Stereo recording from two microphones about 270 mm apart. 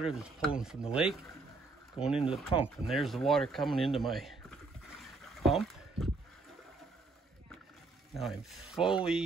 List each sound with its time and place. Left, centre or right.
0.0 s speech: centre
2.5 s speech: centre
2.9 s speech: centre
5.4 s a sound: centre
8.1 s speech: centre